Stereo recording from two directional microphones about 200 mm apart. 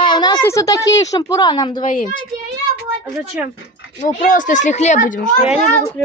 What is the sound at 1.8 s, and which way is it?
Speech, 40° left (ahead or behind).